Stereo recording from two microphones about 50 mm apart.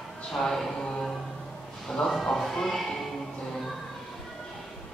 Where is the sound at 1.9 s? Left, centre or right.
Centre.